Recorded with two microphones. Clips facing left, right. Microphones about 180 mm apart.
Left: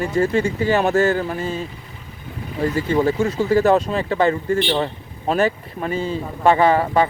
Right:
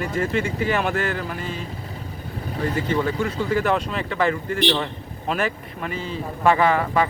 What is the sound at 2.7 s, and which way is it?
Speech, 35° left (ahead or behind).